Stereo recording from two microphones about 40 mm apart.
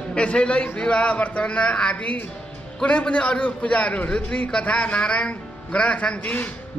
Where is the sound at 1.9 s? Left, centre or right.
Left.